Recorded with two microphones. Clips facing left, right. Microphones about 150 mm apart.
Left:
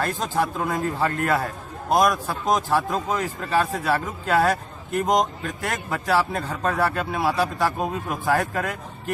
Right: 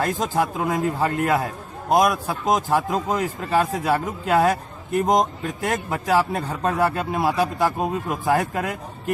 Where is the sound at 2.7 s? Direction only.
15° right (ahead or behind).